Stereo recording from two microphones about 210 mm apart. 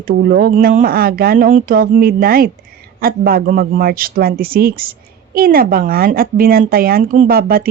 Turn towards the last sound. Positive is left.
turn(degrees=-45)  # may be behind; listen again after turning